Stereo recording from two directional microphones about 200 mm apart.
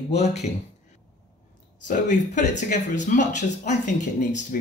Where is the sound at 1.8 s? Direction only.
40° left (ahead or behind).